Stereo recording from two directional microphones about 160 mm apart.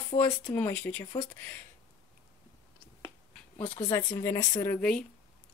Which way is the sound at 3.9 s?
20° left (ahead or behind).